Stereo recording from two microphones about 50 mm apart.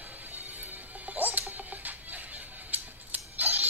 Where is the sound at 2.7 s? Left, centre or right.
Right.